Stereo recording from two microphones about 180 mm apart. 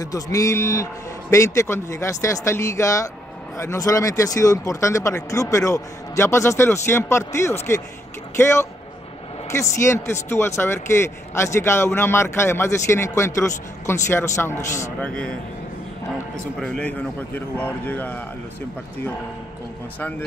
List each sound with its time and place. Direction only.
0.0 s a man's voice: 20° left (ahead or behind)
9.5 s a man's voice: 15° left (ahead or behind)
16.5 s a man's voice: 5° left (ahead or behind)
20.0 s a man's voice: 10° left (ahead or behind)